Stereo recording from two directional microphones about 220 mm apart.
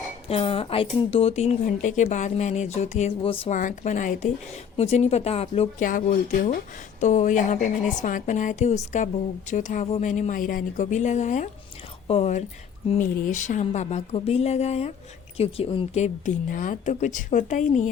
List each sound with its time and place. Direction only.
0.3 s speech: 25° left (ahead or behind)